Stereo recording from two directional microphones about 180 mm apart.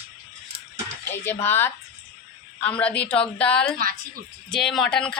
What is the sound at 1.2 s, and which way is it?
A woman's voice, 10° left (ahead or behind).